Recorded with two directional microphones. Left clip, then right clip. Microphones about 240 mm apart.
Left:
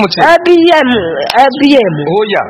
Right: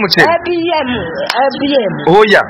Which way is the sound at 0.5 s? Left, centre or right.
Left.